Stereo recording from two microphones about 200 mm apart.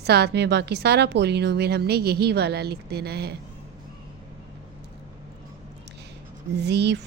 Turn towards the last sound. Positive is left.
turn(degrees=-60)  # may be behind; listen again after turning